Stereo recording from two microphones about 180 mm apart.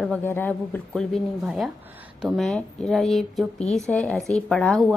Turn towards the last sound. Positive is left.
turn(degrees=0)  # may be behind; listen again after turning